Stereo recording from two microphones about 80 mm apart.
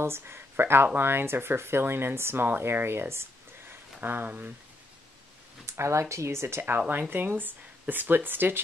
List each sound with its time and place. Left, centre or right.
0.0 s speech: right
5.7 s speech: right